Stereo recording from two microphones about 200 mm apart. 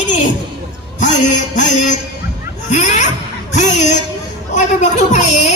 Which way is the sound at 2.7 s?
35° left (ahead or behind).